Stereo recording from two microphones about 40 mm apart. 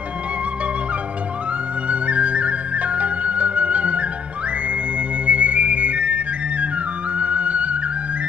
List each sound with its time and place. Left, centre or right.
1.9 s flute: right
5.2 s music: right